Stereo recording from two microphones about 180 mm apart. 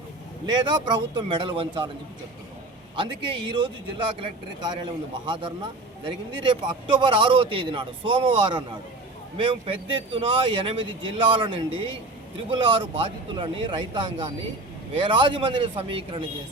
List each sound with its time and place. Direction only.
0.4 s speech: 25° right (ahead or behind)
2.9 s speech: 25° right (ahead or behind)